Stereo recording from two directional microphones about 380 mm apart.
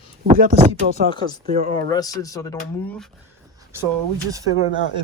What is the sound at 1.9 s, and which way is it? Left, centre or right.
Speech, centre.